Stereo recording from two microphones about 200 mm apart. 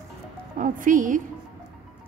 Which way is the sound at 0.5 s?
40° right (ahead or behind).